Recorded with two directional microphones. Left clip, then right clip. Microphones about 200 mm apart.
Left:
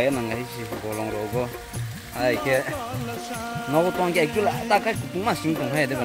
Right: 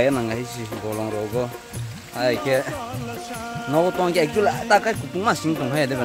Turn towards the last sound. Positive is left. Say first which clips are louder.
# right 1 dB
turn(degrees=-20)  # may be behind; listen again after turning